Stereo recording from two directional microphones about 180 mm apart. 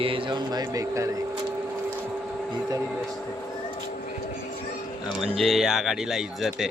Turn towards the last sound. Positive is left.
turn(degrees=0)  # may be behind; listen again after turning